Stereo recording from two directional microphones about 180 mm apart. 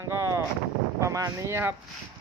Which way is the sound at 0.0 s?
15° right (ahead or behind).